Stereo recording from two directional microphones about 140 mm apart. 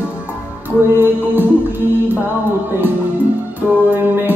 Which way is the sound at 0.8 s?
15° right (ahead or behind).